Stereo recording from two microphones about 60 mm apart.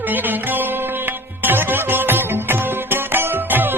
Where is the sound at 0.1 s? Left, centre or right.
Right.